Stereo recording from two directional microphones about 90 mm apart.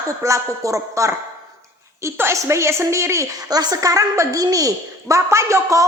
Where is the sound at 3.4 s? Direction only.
45° right (ahead or behind).